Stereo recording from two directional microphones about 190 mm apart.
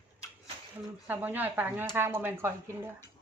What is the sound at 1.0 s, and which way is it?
Speech, 10° right (ahead or behind).